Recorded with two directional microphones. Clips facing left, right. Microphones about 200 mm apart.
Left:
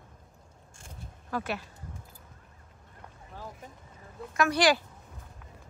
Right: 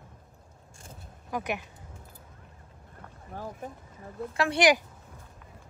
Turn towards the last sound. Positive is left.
turn(degrees=-20)  # may be behind; listen again after turning